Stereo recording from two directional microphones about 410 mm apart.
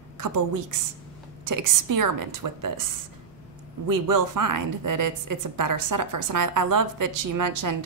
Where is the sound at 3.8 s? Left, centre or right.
Right.